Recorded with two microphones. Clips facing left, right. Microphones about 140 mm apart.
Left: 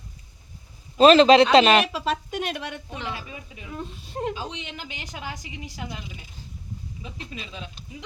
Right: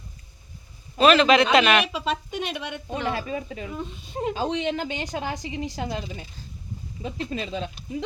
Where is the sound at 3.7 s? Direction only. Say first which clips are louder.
Right 2 dB; centre (ahead or behind).